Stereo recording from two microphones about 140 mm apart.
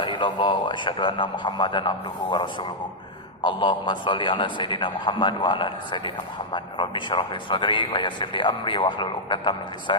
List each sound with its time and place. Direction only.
0.0 s speech: 35° left (ahead or behind)
3.4 s speech: 35° left (ahead or behind)